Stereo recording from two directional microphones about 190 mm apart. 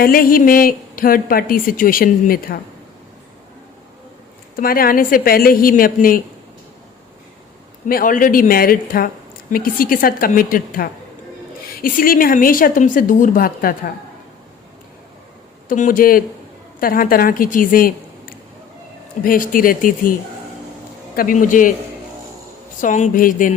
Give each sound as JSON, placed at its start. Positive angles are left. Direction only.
{"t": 0.0, "sound": "a woman's voice", "side_deg": 50}
{"t": 4.5, "sound": "a woman's voice", "side_deg": 50}
{"t": 7.9, "sound": "a woman's voice", "side_deg": 50}
{"t": 15.7, "sound": "a woman's voice", "side_deg": 45}
{"t": 21.2, "sound": "a woman's voice", "side_deg": 45}
{"t": 22.8, "sound": "a woman's voice", "side_deg": 45}